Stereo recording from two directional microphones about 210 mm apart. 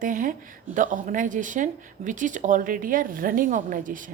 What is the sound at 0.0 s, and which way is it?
A woman's voice, 40° right (ahead or behind).